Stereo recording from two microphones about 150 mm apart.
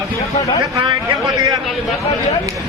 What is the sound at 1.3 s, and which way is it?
Speech, 25° right (ahead or behind).